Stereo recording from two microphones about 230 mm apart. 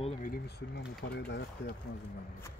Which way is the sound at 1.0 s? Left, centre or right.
Left.